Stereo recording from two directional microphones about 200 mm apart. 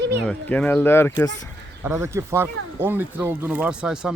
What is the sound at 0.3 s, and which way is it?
Speech, 5° left (ahead or behind).